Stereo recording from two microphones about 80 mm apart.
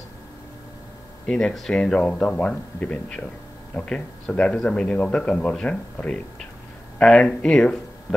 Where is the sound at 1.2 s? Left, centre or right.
Centre.